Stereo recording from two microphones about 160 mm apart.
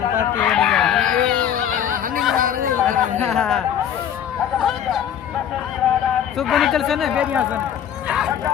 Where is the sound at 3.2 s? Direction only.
5° left (ahead or behind).